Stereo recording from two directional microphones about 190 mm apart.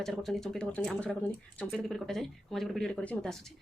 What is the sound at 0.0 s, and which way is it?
Speech, centre (ahead or behind).